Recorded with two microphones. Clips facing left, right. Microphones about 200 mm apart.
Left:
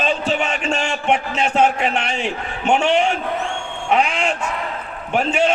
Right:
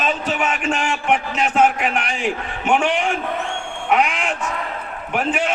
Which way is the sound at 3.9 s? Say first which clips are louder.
Left 1 dB; 25° left (ahead or behind).